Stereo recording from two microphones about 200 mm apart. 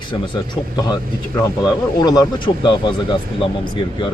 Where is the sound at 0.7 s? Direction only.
20° left (ahead or behind).